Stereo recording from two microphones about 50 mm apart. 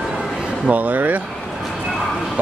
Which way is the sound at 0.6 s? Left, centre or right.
Right.